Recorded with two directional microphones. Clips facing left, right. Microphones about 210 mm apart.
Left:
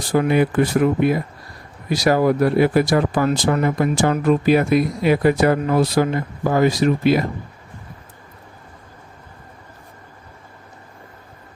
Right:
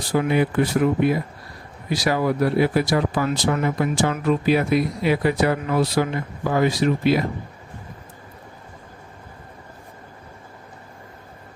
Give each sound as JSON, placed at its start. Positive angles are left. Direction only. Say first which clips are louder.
{"t": 0.1, "sound": "speech", "louder": "left 3 dB", "side_deg": 50}